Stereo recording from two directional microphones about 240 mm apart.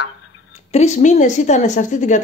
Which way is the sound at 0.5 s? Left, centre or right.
Left.